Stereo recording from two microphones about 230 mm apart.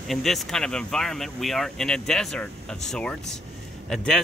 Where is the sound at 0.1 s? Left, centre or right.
Centre.